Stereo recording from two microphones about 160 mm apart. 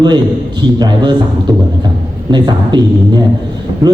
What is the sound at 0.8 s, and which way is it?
Speech, 25° right (ahead or behind).